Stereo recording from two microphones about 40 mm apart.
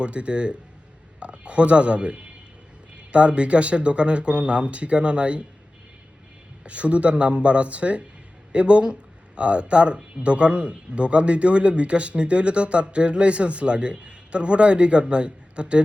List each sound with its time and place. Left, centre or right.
0.0 s speech: right
6.7 s a man's voice: right